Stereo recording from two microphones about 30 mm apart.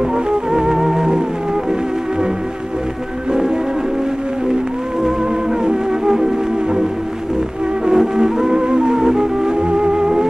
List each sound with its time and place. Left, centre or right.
0.1 s music: right
5.0 s music: right